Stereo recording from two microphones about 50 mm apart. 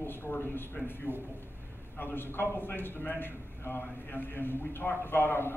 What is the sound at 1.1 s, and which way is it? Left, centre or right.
Speech, right.